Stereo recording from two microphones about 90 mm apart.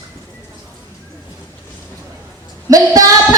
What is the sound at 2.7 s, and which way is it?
Speech, 40° right (ahead or behind).